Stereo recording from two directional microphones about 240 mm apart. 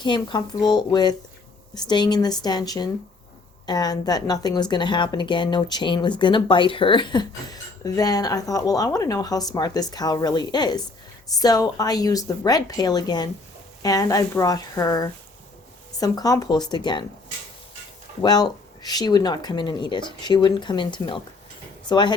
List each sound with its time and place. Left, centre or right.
0.0 s speech: centre
18.2 s speech: centre